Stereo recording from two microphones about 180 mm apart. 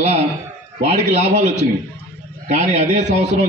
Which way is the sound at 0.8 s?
40° right (ahead or behind).